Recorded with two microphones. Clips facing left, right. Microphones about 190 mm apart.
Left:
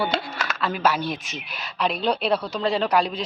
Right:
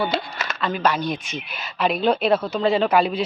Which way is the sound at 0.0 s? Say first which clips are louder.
Right 1 dB; centre (ahead or behind).